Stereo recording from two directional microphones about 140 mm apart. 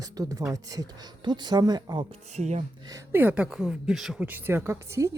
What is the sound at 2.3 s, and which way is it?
Speech, 55° right (ahead or behind).